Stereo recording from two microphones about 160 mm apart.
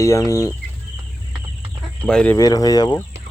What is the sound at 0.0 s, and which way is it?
Speech, 20° left (ahead or behind).